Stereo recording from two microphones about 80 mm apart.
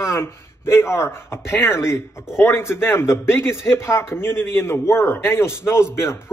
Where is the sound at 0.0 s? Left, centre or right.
Left.